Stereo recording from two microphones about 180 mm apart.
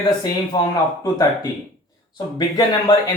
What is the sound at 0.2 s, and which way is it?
Speech, 20° left (ahead or behind).